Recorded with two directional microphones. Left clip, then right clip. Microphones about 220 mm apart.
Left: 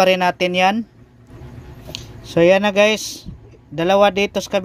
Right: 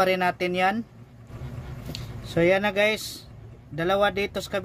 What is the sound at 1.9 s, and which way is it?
Speech, 25° left (ahead or behind).